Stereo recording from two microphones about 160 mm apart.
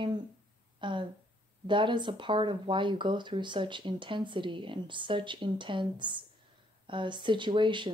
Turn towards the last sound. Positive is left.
turn(degrees=-30)  # may be behind; listen again after turning